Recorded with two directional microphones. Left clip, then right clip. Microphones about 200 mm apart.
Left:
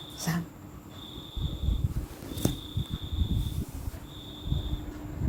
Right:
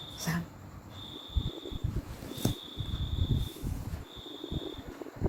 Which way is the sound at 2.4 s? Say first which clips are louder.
Left 3 dB; 30° left (ahead or behind).